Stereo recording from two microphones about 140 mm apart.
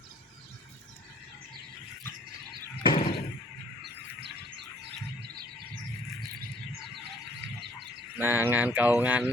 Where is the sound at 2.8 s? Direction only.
35° left (ahead or behind).